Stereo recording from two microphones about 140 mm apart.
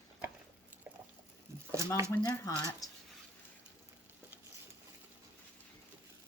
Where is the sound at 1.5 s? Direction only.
20° right (ahead or behind).